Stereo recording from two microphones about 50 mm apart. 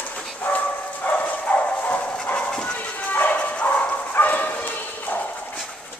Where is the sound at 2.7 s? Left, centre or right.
Left.